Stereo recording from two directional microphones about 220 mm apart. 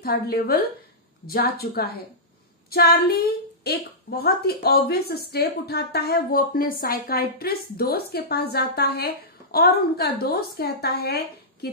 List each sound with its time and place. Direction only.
0.0 s a woman's voice: 45° left (ahead or behind)